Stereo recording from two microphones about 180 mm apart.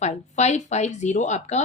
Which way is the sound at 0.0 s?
40° left (ahead or behind).